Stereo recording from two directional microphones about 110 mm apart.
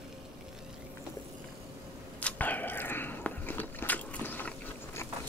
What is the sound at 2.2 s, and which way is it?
Biting, 15° left (ahead or behind).